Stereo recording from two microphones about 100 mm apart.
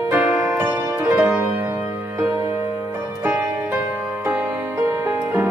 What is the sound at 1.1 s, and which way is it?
Music, 15° right (ahead or behind).